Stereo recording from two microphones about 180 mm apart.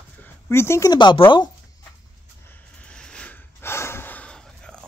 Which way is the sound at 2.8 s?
5° left (ahead or behind).